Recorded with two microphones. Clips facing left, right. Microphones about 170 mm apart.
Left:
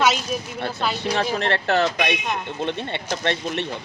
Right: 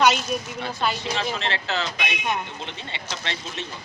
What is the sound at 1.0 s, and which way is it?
Speech, 55° left (ahead or behind).